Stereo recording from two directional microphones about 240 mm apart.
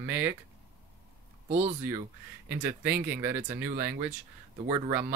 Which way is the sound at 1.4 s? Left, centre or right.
Right.